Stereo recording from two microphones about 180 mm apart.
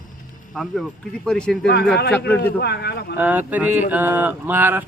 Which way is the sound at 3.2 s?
10° right (ahead or behind).